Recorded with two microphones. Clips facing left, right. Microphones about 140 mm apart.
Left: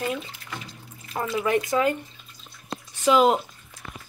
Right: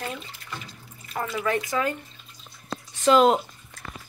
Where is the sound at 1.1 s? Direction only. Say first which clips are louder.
Left 3 dB; 15° left (ahead or behind).